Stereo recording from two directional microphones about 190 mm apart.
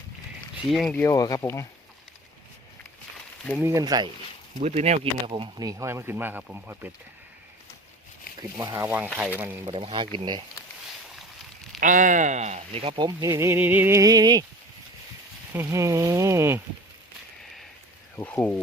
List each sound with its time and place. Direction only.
0.7 s speech: centre (ahead or behind)
1.0 s speech: 20° left (ahead or behind)
3.6 s speech: 15° right (ahead or behind)
4.6 s speech: 35° right (ahead or behind); by 6.9 s 10° right (ahead or behind)
8.4 s speech: 20° right (ahead or behind)
9.6 s speech: 25° right (ahead or behind)
11.8 s speech: 45° right (ahead or behind); by 14.4 s 20° right (ahead or behind)
15.5 s speech: 15° right (ahead or behind)
18.2 s speech: 5° left (ahead or behind)